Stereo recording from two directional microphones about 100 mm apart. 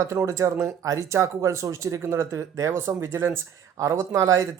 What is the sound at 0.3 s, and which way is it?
Speech, 35° right (ahead or behind).